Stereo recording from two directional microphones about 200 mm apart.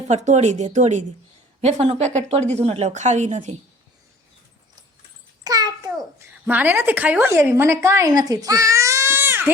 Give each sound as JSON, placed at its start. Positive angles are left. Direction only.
{"t": 0.1, "sound": "speech", "side_deg": -35}
{"t": 5.4, "sound": "a sound", "side_deg": -20}
{"t": 6.4, "sound": "a woman's voice", "side_deg": -10}